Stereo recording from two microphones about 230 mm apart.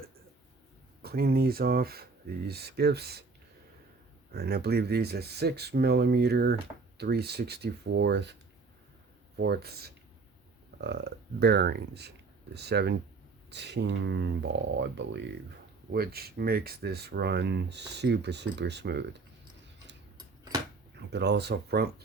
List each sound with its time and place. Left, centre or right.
1.0 s speech: right
4.3 s speech: right
9.4 s speech: right
20.1 s a sound: centre
21.1 s speech: right